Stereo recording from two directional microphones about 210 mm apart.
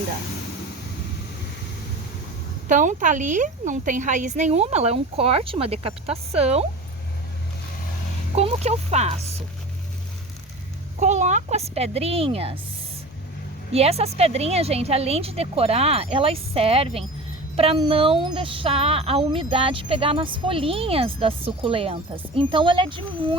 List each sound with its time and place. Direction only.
2.6 s a woman's voice: 35° right (ahead or behind)
8.4 s a woman's voice: 30° right (ahead or behind)
11.0 s speech: 35° right (ahead or behind)
13.7 s speech: 30° right (ahead or behind)